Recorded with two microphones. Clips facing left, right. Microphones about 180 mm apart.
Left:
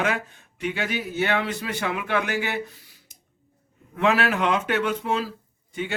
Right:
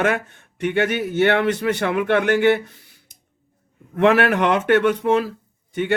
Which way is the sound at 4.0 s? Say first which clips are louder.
Right 6 dB; 60° right (ahead or behind).